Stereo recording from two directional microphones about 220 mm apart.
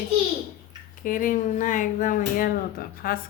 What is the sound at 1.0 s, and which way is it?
A woman's voice, 35° left (ahead or behind).